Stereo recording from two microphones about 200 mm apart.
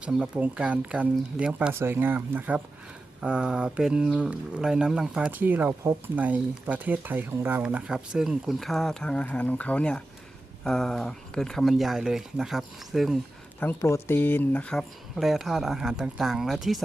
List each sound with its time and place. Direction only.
0.0 s speech: 5° right (ahead or behind)
13.6 s speech: 10° left (ahead or behind)